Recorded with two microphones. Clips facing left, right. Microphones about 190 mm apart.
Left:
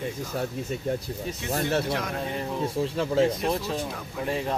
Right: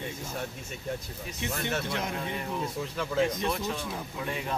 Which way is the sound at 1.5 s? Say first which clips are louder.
Left 6 dB; 35° left (ahead or behind).